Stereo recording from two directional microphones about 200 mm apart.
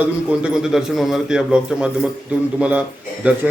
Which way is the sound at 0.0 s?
5° right (ahead or behind).